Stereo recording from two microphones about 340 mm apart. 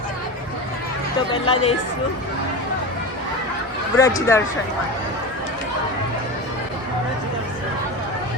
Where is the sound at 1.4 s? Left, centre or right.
Centre.